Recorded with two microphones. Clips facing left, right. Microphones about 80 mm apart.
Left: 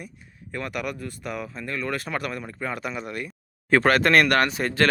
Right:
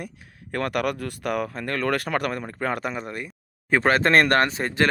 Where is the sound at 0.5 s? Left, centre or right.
Right.